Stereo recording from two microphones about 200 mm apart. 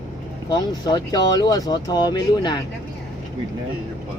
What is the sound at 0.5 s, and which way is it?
Speech, 20° left (ahead or behind).